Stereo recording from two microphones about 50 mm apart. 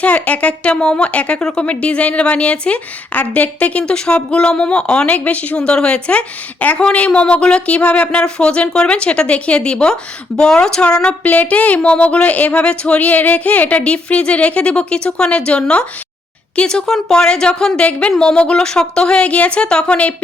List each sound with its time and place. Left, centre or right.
0.0 s speech: left
3.8 s speech: centre
5.5 s a woman's voice: centre
11.2 s a woman's voice: left